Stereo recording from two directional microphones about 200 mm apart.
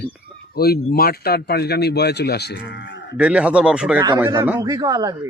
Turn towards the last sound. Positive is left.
turn(degrees=-20)  # may be behind; listen again after turning